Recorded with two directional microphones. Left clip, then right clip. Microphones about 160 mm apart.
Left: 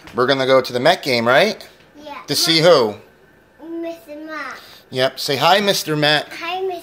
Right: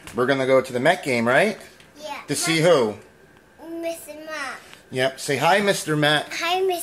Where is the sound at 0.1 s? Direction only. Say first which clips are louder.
Left 4 dB; 5° left (ahead or behind).